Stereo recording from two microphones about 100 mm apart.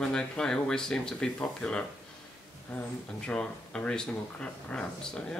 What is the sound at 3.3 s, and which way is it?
Speech, 10° left (ahead or behind).